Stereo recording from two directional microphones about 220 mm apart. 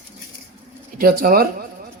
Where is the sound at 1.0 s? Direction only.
40° right (ahead or behind).